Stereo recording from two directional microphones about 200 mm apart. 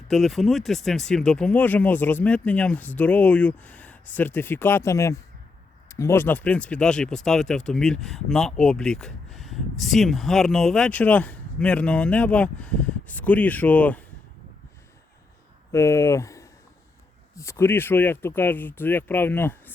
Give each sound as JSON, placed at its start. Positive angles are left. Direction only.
{"t": 0.1, "sound": "speech", "side_deg": 0}
{"t": 15.7, "sound": "speech", "side_deg": 15}